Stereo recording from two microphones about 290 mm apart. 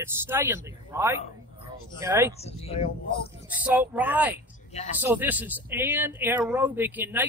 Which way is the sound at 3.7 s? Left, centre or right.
Centre.